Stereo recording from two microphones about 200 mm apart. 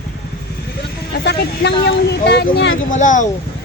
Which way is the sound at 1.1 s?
55° left (ahead or behind).